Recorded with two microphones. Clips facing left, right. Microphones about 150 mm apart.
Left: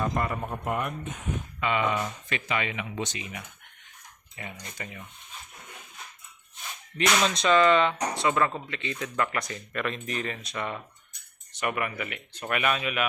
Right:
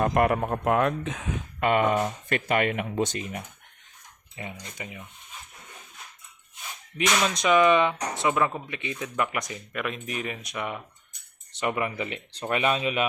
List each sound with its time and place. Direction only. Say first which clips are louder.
0.0 s speech: right 7 dB; 70° right (ahead or behind); by 1.3 s 90° right
1.5 s speech: right 5 dB; 50° right (ahead or behind)
4.4 s speech: right 2 dB; 20° right (ahead or behind)
6.9 s speech: even; 10° right (ahead or behind); by 13.1 s 30° right (ahead or behind)